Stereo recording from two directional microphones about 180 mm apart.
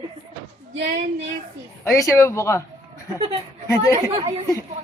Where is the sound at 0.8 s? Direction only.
40° right (ahead or behind).